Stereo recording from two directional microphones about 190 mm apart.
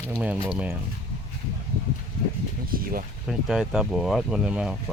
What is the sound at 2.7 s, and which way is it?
Speech, 50° right (ahead or behind).